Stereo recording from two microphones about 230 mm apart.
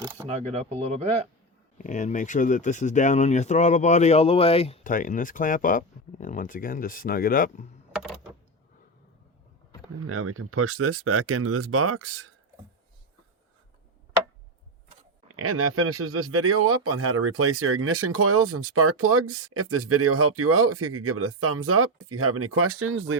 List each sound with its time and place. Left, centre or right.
0.3 s speech: right
1.8 s speech: left
10.1 s speech: right
15.4 s speech: right